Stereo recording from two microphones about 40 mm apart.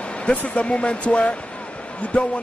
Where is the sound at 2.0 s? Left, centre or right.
Left.